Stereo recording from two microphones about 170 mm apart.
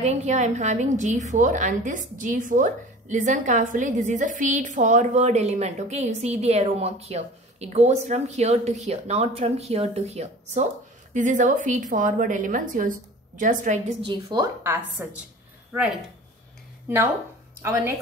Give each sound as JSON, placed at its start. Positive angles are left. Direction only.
{"t": 0.0, "sound": "a woman's voice", "side_deg": -40}
{"t": 14.0, "sound": "a woman's voice", "side_deg": -25}
{"t": 17.6, "sound": "a woman's voice", "side_deg": -15}